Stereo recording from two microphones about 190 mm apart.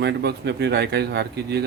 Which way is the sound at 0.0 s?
60° right (ahead or behind).